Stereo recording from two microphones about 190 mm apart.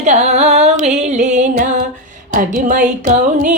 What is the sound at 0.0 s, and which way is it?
Music, 35° right (ahead or behind).